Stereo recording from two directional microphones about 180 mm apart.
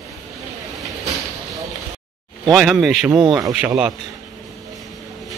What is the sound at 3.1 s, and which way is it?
Speech, 20° right (ahead or behind).